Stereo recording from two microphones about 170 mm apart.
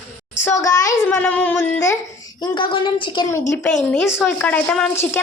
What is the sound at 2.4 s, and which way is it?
Speech, 25° left (ahead or behind).